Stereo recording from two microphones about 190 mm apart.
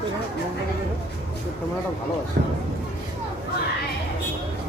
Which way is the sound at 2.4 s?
60° right (ahead or behind).